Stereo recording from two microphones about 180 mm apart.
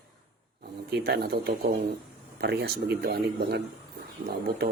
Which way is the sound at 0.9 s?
65° right (ahead or behind).